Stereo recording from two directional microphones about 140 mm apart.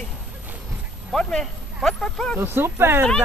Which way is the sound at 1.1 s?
5° left (ahead or behind).